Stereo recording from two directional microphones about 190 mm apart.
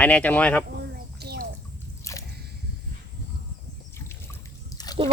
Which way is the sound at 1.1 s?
55° right (ahead or behind).